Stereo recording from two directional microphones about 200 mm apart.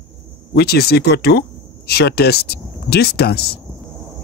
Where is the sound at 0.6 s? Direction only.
55° left (ahead or behind).